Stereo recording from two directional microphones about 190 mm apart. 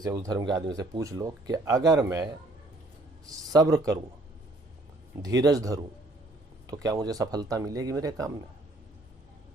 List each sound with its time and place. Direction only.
0.0 s speech: 20° right (ahead or behind)
3.5 s speech: 20° right (ahead or behind)
5.2 s speech: 20° right (ahead or behind)